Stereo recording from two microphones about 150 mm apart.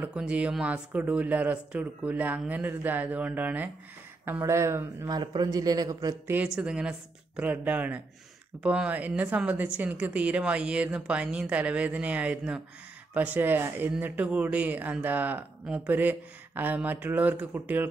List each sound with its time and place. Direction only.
0.0 s speech: 10° right (ahead or behind)